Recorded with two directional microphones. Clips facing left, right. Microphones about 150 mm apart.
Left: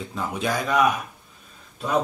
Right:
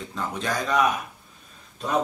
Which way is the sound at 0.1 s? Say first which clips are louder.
Left 2 dB; 10° left (ahead or behind).